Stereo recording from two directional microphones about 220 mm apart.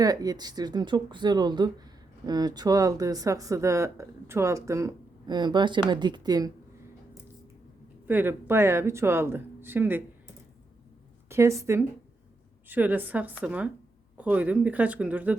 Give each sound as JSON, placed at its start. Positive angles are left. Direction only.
{"t": 0.0, "sound": "speech", "side_deg": -15}
{"t": 8.0, "sound": "speech", "side_deg": -10}
{"t": 11.3, "sound": "speech", "side_deg": -10}